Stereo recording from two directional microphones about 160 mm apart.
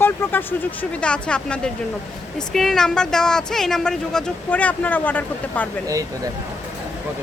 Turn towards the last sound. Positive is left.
turn(degrees=-20)  # may be behind; listen again after turning